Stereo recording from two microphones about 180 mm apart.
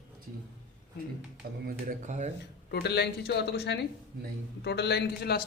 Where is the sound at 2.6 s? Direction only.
65° left (ahead or behind).